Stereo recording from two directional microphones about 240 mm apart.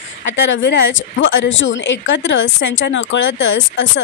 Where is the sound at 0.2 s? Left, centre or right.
Left.